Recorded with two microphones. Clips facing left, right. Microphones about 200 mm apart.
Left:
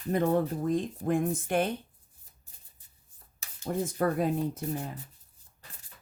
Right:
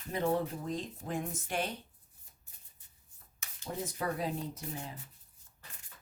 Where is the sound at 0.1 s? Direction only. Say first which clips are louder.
Left 6 dB; 50° left (ahead or behind).